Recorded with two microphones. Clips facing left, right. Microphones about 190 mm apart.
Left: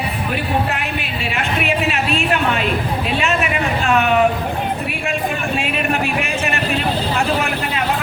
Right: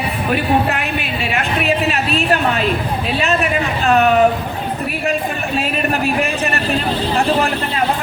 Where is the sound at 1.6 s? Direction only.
35° right (ahead or behind).